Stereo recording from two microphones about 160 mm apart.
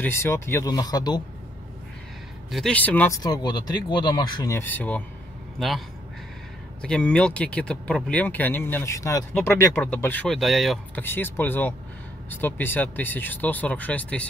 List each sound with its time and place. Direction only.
0.0 s speech: 15° left (ahead or behind)
2.5 s speech: 5° left (ahead or behind)
3.1 s a man's voice: 25° left (ahead or behind); by 5.7 s centre (ahead or behind)
6.8 s speech: 5° left (ahead or behind)
11.0 s speech: 15° left (ahead or behind)